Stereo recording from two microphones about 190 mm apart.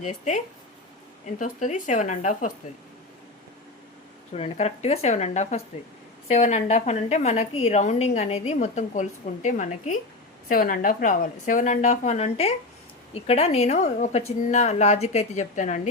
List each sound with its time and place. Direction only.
0.0 s a woman's voice: 40° left (ahead or behind)
4.4 s a woman's voice: 30° left (ahead or behind)